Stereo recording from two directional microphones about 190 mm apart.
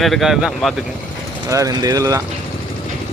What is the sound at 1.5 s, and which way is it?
Speech, 20° right (ahead or behind).